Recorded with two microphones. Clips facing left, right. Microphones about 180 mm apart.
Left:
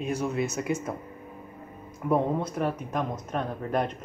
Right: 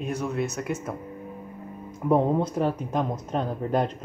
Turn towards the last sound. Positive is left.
turn(degrees=-30)  # may be behind; listen again after turning